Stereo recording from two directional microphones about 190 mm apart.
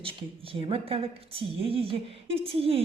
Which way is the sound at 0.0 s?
30° right (ahead or behind).